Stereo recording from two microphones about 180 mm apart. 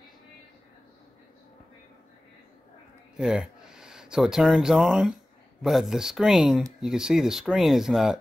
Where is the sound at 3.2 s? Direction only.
5° right (ahead or behind).